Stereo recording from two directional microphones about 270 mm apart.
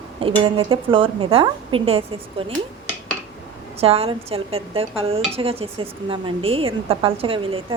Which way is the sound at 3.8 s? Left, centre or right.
Right.